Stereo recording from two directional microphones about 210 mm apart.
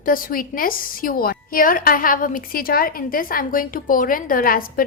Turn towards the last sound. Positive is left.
turn(degrees=40)  # may be behind; listen again after turning